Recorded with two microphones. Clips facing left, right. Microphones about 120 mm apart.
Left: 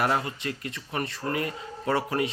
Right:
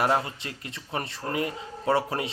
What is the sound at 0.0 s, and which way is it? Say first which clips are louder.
Speech: right 1 dB; 25° right (ahead or behind).